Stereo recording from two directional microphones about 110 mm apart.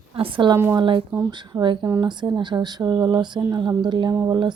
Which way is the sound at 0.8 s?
50° right (ahead or behind).